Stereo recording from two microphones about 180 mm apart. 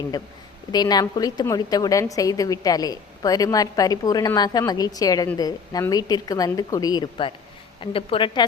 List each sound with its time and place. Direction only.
0.7 s a woman's voice: 20° left (ahead or behind)